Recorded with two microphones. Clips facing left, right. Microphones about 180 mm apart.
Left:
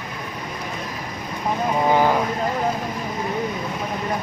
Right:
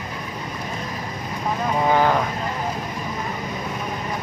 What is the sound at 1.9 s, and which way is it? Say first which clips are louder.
Vehicle: even; 10° left (ahead or behind).